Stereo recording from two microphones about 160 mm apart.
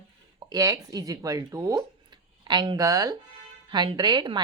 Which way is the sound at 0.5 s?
20° right (ahead or behind).